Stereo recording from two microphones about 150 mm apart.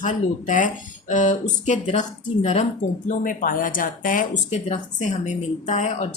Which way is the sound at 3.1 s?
65° left (ahead or behind).